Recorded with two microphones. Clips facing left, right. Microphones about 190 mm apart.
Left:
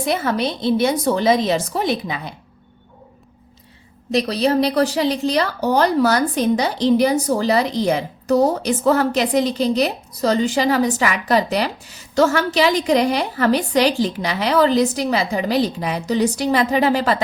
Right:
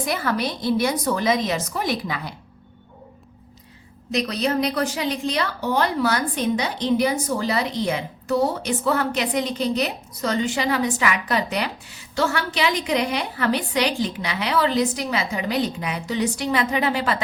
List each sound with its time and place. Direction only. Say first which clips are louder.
0.0 s a woman's voice: left 4 dB; 25° left (ahead or behind)
4.1 s a woman's voice: left 5 dB; 35° left (ahead or behind)